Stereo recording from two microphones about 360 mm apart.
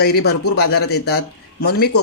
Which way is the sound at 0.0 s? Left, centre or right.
Left.